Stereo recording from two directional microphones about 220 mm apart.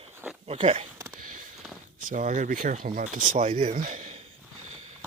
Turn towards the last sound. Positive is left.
turn(degrees=-30)  # may be behind; listen again after turning